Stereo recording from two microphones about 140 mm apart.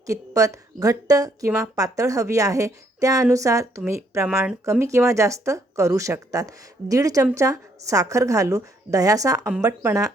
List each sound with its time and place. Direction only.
0.0 s speech: 25° right (ahead or behind)